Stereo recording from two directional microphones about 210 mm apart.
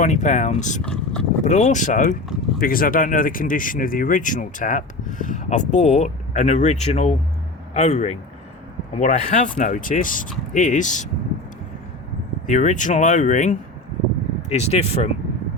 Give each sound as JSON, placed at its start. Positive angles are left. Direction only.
{"t": 0.0, "sound": "speech", "side_deg": 35}
{"t": 0.8, "sound": "speech", "side_deg": 5}
{"t": 1.5, "sound": "speech", "side_deg": 35}
{"t": 12.5, "sound": "speech", "side_deg": 35}